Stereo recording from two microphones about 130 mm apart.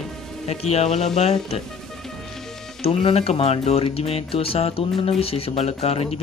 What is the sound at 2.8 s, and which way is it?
Speech, 50° left (ahead or behind).